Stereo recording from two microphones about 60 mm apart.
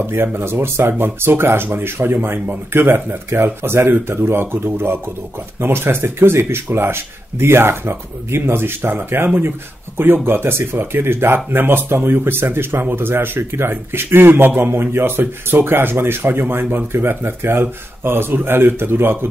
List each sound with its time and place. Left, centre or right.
0.0 s speech: right